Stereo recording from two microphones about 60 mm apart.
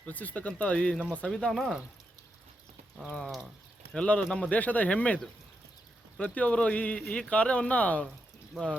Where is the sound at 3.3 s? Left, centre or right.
Centre.